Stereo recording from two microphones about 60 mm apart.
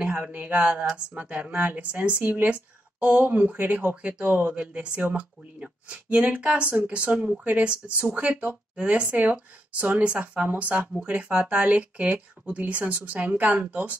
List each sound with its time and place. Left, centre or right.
0.1 s speech: right
4.6 s speech: centre